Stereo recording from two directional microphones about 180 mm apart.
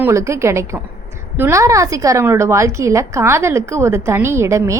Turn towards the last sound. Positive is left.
turn(degrees=-15)  # may be behind; listen again after turning